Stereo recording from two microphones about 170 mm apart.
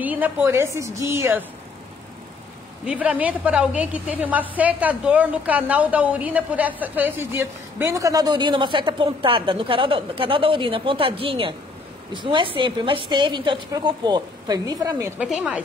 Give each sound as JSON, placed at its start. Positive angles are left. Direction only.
{"t": 0.0, "sound": "a woman's voice", "side_deg": -10}
{"t": 2.8, "sound": "a woman's voice", "side_deg": -10}
{"t": 15.1, "sound": "a woman's voice", "side_deg": -5}